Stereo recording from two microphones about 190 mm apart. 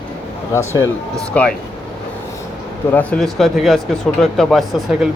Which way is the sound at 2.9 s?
5° left (ahead or behind).